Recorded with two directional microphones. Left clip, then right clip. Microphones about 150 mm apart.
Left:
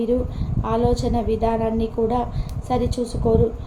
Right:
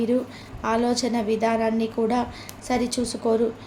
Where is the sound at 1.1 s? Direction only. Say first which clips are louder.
Left 1 dB; 30° right (ahead or behind).